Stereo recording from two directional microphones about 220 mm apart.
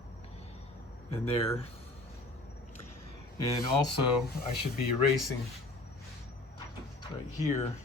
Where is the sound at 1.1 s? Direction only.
30° left (ahead or behind).